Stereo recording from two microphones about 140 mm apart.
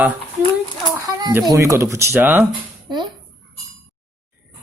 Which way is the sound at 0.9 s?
20° right (ahead or behind).